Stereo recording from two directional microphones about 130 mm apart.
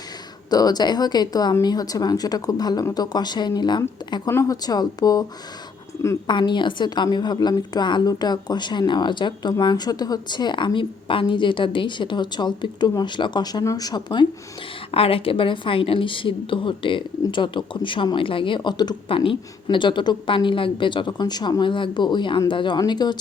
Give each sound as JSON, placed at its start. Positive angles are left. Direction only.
{"t": 0.5, "sound": "a woman's voice", "side_deg": 30}
{"t": 4.3, "sound": "speech", "side_deg": 25}
{"t": 6.2, "sound": "a woman's voice", "side_deg": 35}
{"t": 14.9, "sound": "a woman's voice", "side_deg": 45}